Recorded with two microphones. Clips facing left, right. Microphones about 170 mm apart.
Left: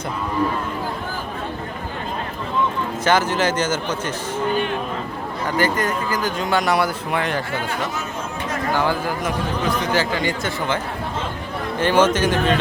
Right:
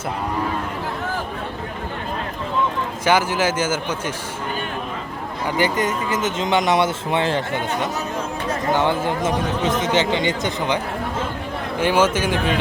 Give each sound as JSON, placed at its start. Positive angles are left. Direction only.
{"t": 3.0, "sound": "speech", "side_deg": -10}
{"t": 5.5, "sound": "speech", "side_deg": -15}
{"t": 11.8, "sound": "speech", "side_deg": -10}